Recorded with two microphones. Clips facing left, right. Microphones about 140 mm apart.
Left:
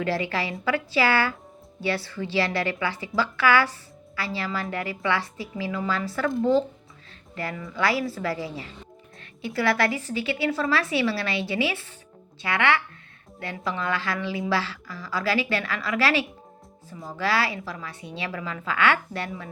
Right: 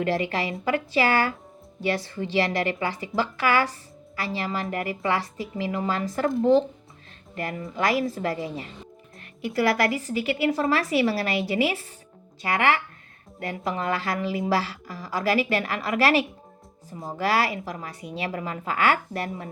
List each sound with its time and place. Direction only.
0.1 s a woman's voice: 40° right (ahead or behind)
6.4 s speech: 20° right (ahead or behind)
7.3 s a woman's voice: 45° right (ahead or behind)
9.5 s a woman's voice: 40° right (ahead or behind)